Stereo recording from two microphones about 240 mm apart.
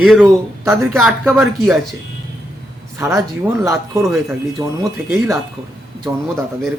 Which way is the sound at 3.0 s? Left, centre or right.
Centre.